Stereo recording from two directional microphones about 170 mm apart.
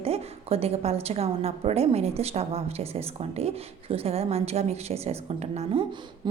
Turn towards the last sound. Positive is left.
turn(degrees=-30)  # may be behind; listen again after turning